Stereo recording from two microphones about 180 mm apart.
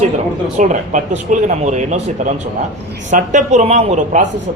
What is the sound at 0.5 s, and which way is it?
A man's voice, 45° right (ahead or behind).